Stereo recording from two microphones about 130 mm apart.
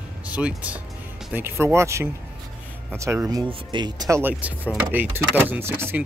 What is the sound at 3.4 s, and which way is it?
Speech, 35° right (ahead or behind).